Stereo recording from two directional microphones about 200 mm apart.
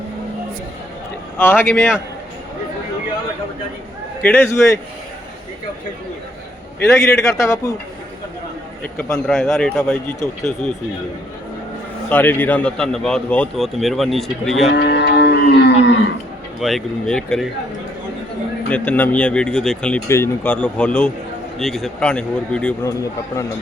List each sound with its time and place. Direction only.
1.4 s speech: 10° left (ahead or behind)
4.2 s speech: 10° left (ahead or behind)
6.8 s speech: 15° left (ahead or behind)
8.8 s a man's voice: 10° left (ahead or behind)
12.0 s speech: 10° left (ahead or behind)
14.7 s livestock: 60° left (ahead or behind)
16.6 s speech: centre (ahead or behind)
18.7 s speech: 10° left (ahead or behind)